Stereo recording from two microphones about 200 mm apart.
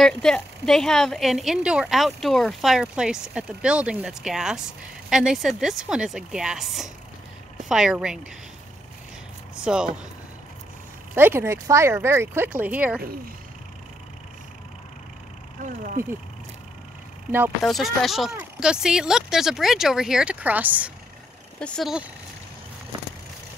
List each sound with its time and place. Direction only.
0.0 s a woman's voice: 5° left (ahead or behind)
9.6 s speech: 5° right (ahead or behind)
11.1 s speech: 10° right (ahead or behind)
15.6 s speech: 40° right (ahead or behind)
17.6 s a woman's voice: centre (ahead or behind)
21.5 s a woman's voice: 5° left (ahead or behind)